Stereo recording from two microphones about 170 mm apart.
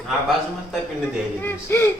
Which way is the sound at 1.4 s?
15° left (ahead or behind).